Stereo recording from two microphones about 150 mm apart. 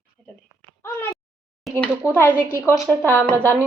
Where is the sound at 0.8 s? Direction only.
15° left (ahead or behind).